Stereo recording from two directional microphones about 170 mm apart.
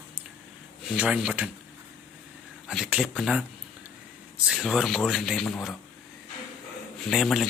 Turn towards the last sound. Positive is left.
turn(degrees=0)  # may be behind; listen again after turning